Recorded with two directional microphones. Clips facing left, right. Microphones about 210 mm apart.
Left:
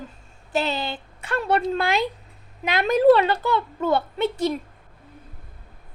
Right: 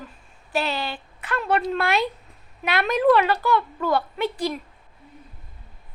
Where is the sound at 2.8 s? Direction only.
25° left (ahead or behind).